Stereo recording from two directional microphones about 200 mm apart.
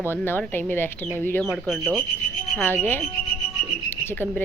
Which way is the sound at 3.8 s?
10° left (ahead or behind).